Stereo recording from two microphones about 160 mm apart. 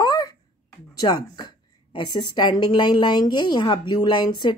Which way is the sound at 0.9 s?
25° left (ahead or behind).